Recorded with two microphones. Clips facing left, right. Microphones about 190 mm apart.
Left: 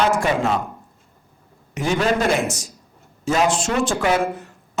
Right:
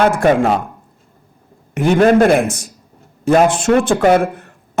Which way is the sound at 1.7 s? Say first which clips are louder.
Right 9 dB; 55° right (ahead or behind).